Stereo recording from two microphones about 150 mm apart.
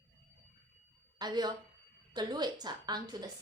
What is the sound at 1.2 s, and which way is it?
A woman's voice, 25° right (ahead or behind).